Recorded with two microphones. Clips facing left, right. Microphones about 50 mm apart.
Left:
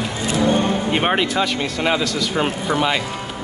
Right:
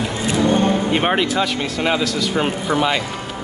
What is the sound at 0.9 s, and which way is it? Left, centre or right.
Speech, centre.